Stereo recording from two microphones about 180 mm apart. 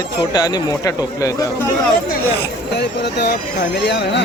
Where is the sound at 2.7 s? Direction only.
65° left (ahead or behind).